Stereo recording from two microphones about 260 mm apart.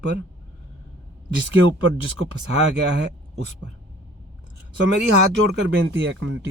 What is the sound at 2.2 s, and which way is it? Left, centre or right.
Speech, right.